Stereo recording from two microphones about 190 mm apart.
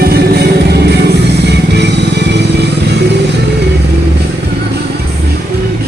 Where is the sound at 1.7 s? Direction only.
65° right (ahead or behind).